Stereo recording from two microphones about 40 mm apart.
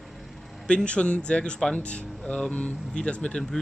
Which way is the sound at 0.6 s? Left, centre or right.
Left.